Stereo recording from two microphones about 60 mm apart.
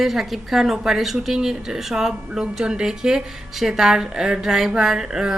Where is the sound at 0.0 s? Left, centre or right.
Centre.